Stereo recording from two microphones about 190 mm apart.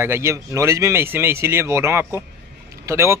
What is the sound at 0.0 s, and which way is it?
A man's voice, 15° right (ahead or behind).